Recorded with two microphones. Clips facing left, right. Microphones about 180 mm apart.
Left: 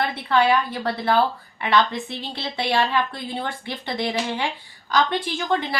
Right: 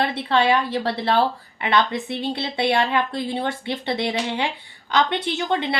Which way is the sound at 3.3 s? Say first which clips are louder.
Right 4 dB; 25° right (ahead or behind).